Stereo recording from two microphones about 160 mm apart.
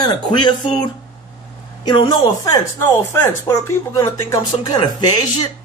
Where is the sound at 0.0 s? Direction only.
30° left (ahead or behind).